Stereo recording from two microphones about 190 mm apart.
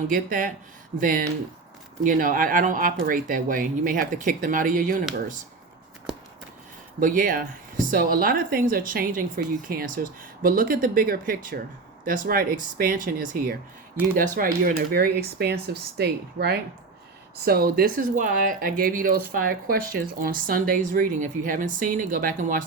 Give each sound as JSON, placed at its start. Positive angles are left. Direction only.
{"t": 0.1, "sound": "speech", "side_deg": -45}
{"t": 7.0, "sound": "speech", "side_deg": -45}